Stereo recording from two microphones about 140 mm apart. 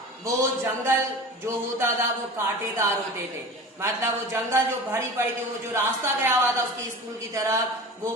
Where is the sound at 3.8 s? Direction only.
20° right (ahead or behind).